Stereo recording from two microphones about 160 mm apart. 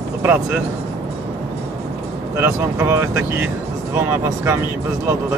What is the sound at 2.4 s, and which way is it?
Speech, 15° right (ahead or behind).